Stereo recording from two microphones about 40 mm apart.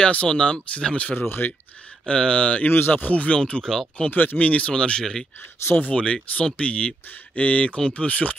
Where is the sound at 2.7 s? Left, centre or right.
Left.